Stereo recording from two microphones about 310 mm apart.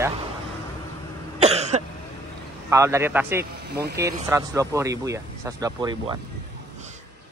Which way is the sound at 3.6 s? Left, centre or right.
Right.